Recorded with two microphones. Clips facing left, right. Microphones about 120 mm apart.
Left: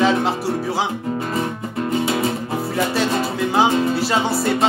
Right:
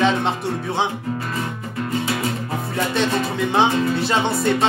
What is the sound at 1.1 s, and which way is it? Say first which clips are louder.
Music: left 3 dB; 25° left (ahead or behind).